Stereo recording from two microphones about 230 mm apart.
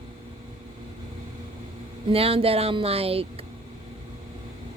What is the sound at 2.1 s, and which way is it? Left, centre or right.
Speech, right.